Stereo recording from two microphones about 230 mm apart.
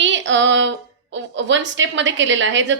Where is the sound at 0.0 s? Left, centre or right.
Right.